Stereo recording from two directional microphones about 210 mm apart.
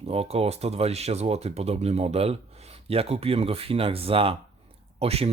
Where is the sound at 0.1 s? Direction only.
30° right (ahead or behind).